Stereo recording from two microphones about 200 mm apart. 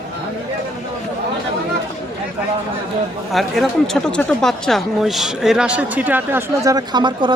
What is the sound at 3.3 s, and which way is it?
Speech, centre (ahead or behind).